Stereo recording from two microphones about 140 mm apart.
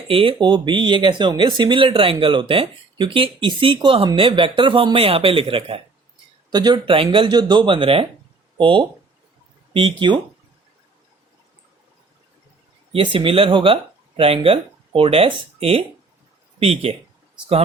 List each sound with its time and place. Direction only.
0.1 s speech: 40° right (ahead or behind)
6.5 s speech: 30° right (ahead or behind)
12.9 s speech: 40° right (ahead or behind)